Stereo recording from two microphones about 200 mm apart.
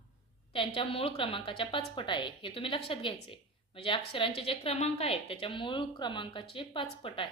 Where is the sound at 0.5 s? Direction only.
25° left (ahead or behind).